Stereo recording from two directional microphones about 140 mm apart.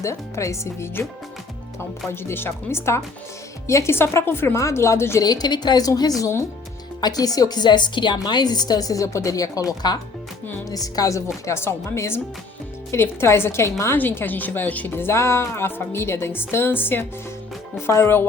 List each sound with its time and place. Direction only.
0.0 s a woman's voice: 20° left (ahead or behind)
2.0 s a woman's voice: 15° left (ahead or behind)